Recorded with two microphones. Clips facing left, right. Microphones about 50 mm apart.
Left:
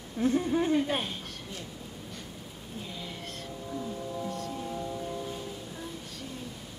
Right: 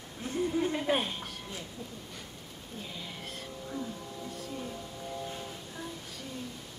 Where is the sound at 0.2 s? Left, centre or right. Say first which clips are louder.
Left 5 dB; left.